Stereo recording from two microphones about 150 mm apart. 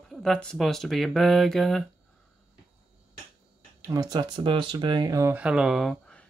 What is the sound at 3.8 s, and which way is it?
Speech, 25° right (ahead or behind).